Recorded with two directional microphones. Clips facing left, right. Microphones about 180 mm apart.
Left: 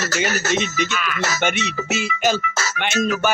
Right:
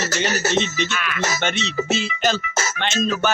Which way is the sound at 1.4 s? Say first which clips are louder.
Left 1 dB; 10° left (ahead or behind).